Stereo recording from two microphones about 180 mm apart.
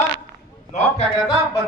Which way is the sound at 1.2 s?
Centre (ahead or behind).